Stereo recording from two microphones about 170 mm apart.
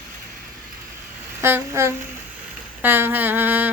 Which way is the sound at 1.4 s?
15° right (ahead or behind).